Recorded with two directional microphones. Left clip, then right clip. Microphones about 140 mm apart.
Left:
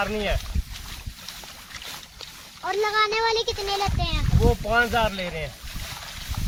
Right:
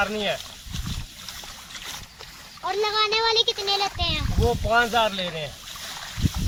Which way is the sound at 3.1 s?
50° left (ahead or behind).